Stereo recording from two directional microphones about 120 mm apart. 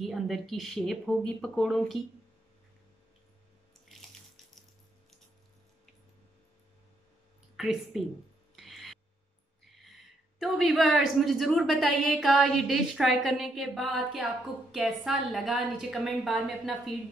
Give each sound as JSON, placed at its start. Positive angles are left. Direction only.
{"t": 0.0, "sound": "a woman's voice", "side_deg": 0}
{"t": 7.5, "sound": "a woman's voice", "side_deg": -5}
{"t": 8.5, "sound": "a sound", "side_deg": 0}
{"t": 10.4, "sound": "a woman's voice", "side_deg": 0}